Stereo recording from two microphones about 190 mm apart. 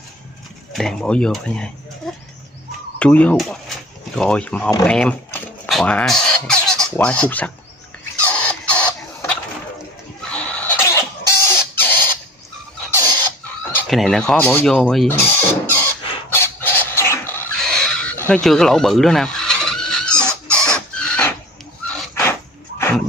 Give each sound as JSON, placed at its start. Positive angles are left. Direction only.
{"t": 0.7, "sound": "speech", "side_deg": 5}
{"t": 2.0, "sound": "a sound", "side_deg": 0}
{"t": 3.0, "sound": "speech", "side_deg": 5}
{"t": 8.2, "sound": "printer", "side_deg": 5}
{"t": 10.3, "sound": "rodents", "side_deg": 5}
{"t": 13.7, "sound": "speech", "side_deg": 5}
{"t": 15.4, "sound": "chicken", "side_deg": 10}
{"t": 20.5, "sound": "squeal", "side_deg": 5}
{"t": 22.1, "sound": "dog", "side_deg": 15}